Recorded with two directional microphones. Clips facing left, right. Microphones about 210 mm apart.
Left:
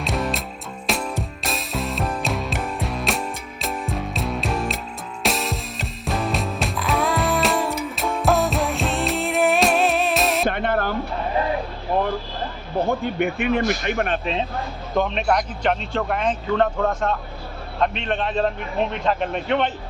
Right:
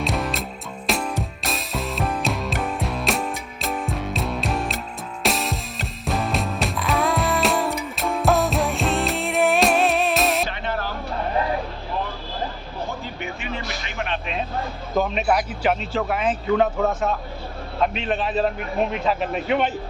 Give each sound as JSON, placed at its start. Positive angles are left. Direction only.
{"t": 0.0, "sound": "music", "side_deg": 0}
{"t": 10.5, "sound": "a sound", "side_deg": 55}
{"t": 12.9, "sound": "a man's voice", "side_deg": 60}
{"t": 14.9, "sound": "a man's voice", "side_deg": -5}